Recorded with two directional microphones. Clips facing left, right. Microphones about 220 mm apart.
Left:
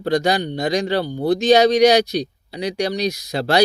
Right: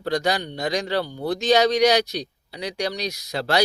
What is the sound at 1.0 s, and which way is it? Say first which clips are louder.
Speech: left 7 dB; 35° left (ahead or behind).